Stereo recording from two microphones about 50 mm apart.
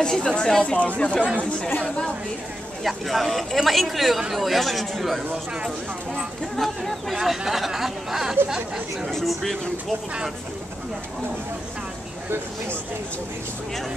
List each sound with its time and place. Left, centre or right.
0.0 s speech: centre
2.8 s speech: centre
6.5 s speech: centre
8.5 s speech: centre
9.1 s speech: centre